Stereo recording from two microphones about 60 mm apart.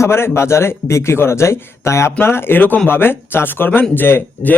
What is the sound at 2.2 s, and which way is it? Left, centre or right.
A man's voice, left.